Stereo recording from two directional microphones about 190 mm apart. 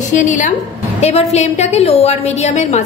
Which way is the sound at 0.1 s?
40° left (ahead or behind).